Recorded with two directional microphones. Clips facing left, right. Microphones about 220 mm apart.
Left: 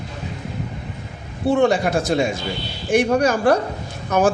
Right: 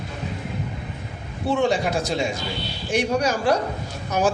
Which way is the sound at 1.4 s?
55° left (ahead or behind).